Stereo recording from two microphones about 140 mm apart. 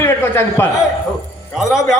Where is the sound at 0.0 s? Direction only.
20° left (ahead or behind).